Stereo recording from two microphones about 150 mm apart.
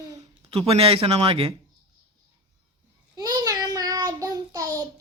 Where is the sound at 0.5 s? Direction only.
40° right (ahead or behind).